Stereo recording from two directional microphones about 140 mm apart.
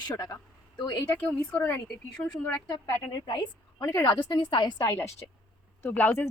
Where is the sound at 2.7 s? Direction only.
30° left (ahead or behind).